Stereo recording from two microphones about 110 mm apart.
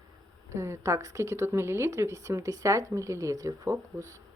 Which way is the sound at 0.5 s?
25° right (ahead or behind).